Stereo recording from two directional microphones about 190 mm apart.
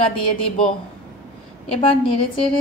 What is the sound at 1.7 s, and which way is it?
Speech, 30° left (ahead or behind).